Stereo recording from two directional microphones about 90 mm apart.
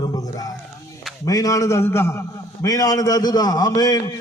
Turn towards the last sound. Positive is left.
turn(degrees=45)  # may be behind; listen again after turning